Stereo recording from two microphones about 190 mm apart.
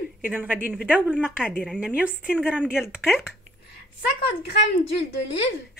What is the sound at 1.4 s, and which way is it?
Speech, 5° left (ahead or behind).